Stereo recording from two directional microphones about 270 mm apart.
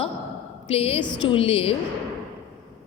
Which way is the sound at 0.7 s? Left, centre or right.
Left.